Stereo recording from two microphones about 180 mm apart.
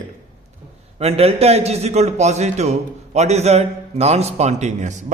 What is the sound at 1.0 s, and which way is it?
A man's voice, 35° right (ahead or behind).